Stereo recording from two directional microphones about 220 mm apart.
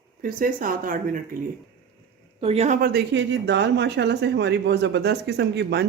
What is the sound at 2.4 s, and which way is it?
Speech, 30° right (ahead or behind).